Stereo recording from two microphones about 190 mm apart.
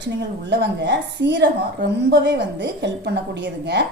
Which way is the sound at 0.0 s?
65° right (ahead or behind).